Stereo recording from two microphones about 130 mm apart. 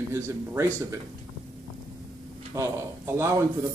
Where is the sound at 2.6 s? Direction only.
25° right (ahead or behind).